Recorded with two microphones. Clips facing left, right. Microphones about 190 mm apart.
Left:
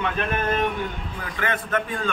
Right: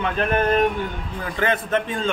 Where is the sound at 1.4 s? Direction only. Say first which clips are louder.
Right 4 dB; 30° right (ahead or behind).